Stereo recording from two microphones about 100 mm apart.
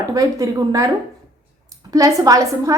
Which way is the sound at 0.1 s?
35° right (ahead or behind).